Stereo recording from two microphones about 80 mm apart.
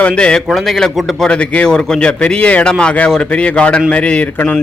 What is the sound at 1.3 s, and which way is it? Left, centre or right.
A man's voice, centre.